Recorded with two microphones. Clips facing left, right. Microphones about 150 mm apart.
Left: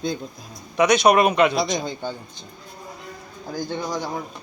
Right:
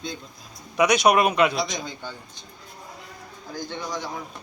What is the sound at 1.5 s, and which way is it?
Speech, 30° left (ahead or behind).